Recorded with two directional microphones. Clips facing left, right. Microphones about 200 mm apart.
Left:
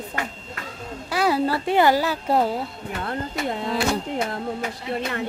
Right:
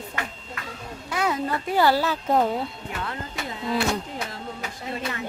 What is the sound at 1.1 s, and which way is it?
Speech, 35° left (ahead or behind).